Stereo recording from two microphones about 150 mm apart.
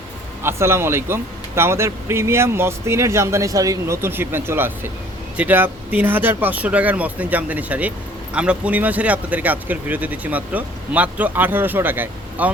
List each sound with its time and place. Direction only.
0.4 s speech: 15° right (ahead or behind)